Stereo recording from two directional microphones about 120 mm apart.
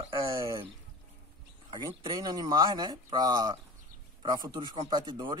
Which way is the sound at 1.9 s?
40° right (ahead or behind).